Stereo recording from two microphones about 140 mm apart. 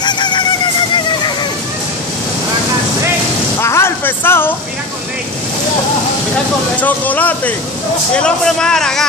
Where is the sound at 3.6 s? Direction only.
20° left (ahead or behind).